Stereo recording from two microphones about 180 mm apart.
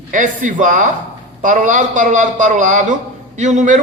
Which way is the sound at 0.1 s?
45° right (ahead or behind).